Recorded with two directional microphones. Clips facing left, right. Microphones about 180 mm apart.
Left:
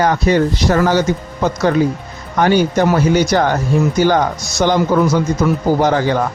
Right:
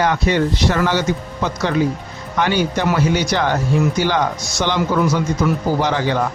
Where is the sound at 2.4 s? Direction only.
45° left (ahead or behind).